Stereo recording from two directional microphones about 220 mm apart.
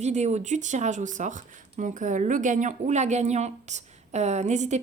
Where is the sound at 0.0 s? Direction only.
30° right (ahead or behind).